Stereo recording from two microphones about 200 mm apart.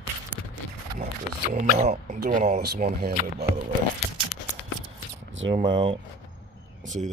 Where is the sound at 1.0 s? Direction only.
35° right (ahead or behind).